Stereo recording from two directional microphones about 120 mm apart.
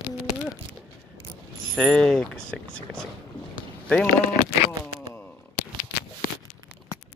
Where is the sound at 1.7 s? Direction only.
5° left (ahead or behind).